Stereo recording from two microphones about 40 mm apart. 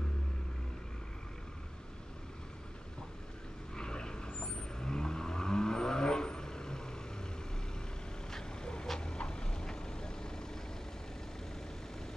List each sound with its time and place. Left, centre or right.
3.7 s vehicle: centre
8.3 s vehicle: centre